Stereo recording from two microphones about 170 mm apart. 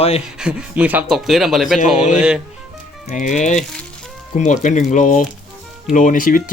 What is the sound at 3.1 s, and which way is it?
Speech, 45° left (ahead or behind).